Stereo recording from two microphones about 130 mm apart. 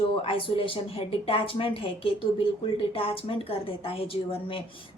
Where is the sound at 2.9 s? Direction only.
45° left (ahead or behind).